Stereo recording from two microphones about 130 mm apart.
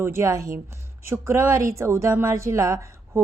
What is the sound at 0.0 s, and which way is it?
A woman's voice, 20° right (ahead or behind).